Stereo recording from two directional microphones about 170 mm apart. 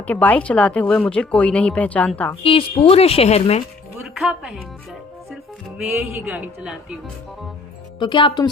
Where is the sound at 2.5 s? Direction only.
35° left (ahead or behind).